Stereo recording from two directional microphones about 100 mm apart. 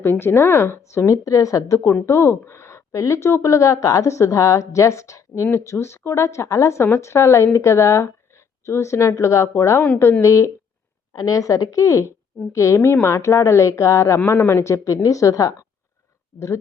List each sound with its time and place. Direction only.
0.0 s a woman's voice: 20° left (ahead or behind)